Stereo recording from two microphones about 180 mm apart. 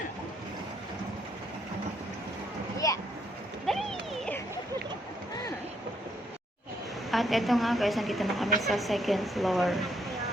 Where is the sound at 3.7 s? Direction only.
Centre (ahead or behind).